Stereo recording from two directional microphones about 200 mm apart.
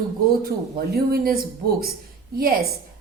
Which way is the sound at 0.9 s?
50° right (ahead or behind).